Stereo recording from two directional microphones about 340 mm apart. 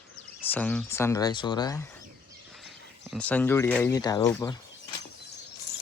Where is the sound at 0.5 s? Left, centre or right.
Centre.